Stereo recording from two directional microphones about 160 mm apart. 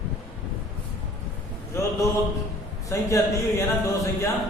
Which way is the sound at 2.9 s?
20° left (ahead or behind).